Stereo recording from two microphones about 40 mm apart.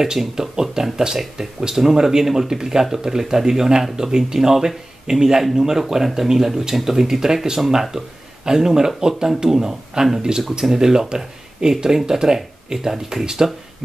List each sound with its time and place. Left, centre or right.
0.0 s speech: centre